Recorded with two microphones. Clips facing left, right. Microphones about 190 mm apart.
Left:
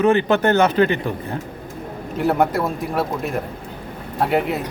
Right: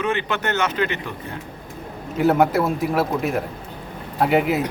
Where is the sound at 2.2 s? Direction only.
Centre (ahead or behind).